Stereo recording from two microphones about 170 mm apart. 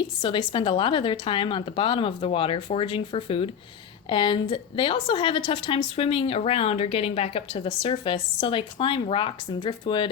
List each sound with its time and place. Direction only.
0.2 s a woman's voice: 30° left (ahead or behind)